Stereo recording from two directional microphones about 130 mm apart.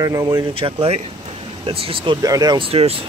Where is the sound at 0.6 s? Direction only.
50° right (ahead or behind).